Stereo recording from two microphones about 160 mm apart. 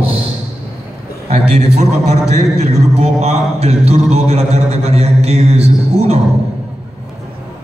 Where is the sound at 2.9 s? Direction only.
40° right (ahead or behind).